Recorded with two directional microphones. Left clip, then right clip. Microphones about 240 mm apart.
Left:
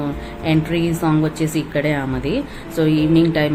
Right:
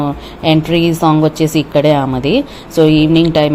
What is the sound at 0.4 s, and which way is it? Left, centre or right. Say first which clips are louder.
A woman's voice: right 8 dB; right.